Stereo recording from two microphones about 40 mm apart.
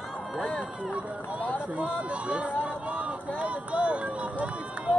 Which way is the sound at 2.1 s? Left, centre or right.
Right.